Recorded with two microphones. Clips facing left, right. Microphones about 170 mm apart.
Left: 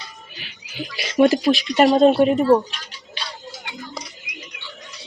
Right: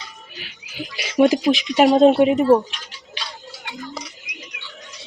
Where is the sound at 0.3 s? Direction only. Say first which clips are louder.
Left 1 dB; 5° right (ahead or behind).